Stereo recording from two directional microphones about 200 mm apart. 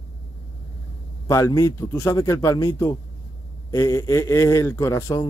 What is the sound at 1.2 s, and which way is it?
Speech, 15° left (ahead or behind).